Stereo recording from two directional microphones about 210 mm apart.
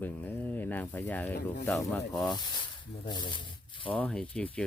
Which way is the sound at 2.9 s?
20° left (ahead or behind).